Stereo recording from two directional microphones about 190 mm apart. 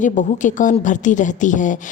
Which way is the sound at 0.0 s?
40° left (ahead or behind).